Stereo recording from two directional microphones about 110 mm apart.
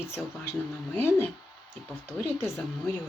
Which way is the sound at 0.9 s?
20° left (ahead or behind).